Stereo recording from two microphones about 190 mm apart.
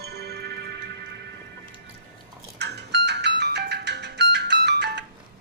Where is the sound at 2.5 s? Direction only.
60° right (ahead or behind).